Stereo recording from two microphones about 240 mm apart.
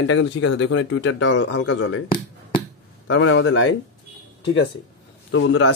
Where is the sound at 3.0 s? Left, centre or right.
Left.